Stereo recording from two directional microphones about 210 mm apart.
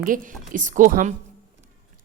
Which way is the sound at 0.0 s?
40° right (ahead or behind).